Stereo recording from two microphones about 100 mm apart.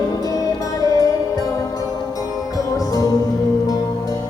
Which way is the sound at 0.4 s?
35° left (ahead or behind).